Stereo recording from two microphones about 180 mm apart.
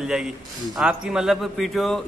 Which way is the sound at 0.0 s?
5° right (ahead or behind).